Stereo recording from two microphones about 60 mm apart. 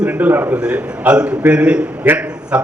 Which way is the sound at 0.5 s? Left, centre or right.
Centre.